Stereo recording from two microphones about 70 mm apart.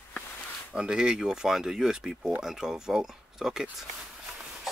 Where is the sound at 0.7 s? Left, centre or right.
Centre.